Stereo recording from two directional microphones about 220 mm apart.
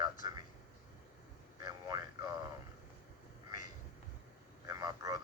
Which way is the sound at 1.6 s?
15° right (ahead or behind).